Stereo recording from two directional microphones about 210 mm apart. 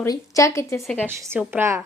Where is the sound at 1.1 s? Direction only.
10° right (ahead or behind).